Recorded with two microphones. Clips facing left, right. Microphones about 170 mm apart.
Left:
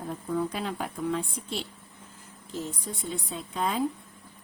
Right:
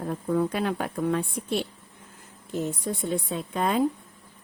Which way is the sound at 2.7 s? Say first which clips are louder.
Right 7 dB; 55° right (ahead or behind).